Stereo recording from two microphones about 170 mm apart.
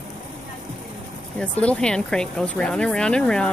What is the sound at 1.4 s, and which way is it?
Speech, 5° left (ahead or behind).